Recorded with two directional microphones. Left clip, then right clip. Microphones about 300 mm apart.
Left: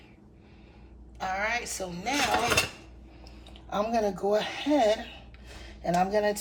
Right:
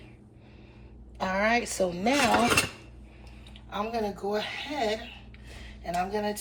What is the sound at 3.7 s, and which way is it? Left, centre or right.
Speech, centre.